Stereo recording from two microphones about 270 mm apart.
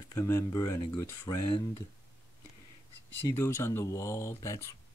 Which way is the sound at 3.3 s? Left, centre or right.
Centre.